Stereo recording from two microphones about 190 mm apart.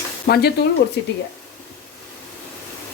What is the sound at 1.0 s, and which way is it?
Speech, 70° left (ahead or behind).